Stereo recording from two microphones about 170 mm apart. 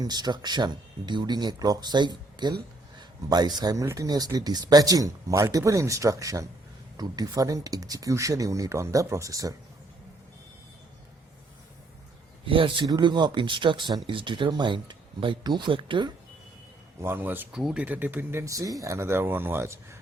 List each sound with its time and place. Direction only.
0.0 s speech: 25° right (ahead or behind)
12.5 s speech: 30° right (ahead or behind)
17.0 s speech: 15° right (ahead or behind)